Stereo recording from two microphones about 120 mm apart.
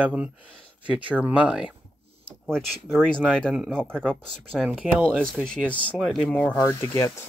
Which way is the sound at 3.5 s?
10° right (ahead or behind).